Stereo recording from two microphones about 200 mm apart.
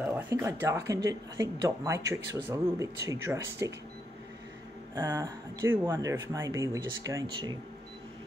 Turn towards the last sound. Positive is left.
turn(degrees=-20)  # may be behind; listen again after turning